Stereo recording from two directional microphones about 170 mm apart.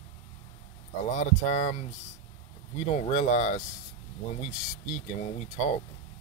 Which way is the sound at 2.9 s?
45° left (ahead or behind).